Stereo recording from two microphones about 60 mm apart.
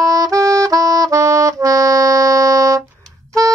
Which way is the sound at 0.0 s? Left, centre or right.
Right.